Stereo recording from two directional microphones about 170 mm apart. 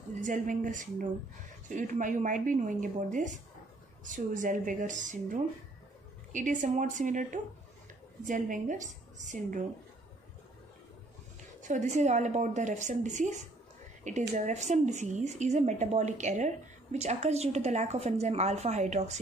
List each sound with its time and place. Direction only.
0.2 s speech: 50° right (ahead or behind)
8.3 s speech: 50° right (ahead or behind)
11.6 s speech: 45° right (ahead or behind)